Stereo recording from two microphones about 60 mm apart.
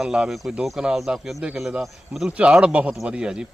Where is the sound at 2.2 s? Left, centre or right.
Right.